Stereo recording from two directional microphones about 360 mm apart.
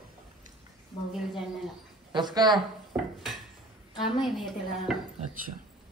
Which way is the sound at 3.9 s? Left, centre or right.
Centre.